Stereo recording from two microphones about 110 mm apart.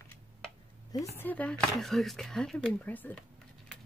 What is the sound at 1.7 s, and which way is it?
Speech, centre (ahead or behind).